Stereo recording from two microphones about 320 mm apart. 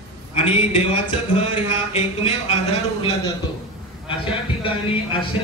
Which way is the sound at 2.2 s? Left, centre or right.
Centre.